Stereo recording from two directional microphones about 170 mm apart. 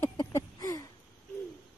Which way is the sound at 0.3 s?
20° left (ahead or behind).